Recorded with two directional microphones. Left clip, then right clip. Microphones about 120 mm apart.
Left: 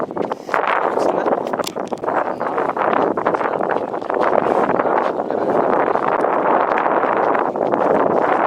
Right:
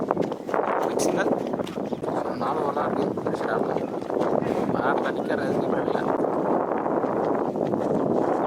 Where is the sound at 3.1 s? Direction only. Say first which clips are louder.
Left 8 dB; 35° left (ahead or behind).